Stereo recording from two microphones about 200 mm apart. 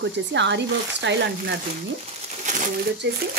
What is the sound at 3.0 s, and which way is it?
Speech, 60° right (ahead or behind).